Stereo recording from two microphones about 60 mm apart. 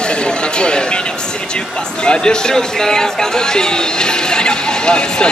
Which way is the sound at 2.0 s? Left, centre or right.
Centre.